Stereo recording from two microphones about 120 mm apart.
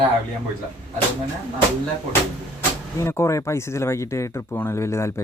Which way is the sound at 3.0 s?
25° left (ahead or behind).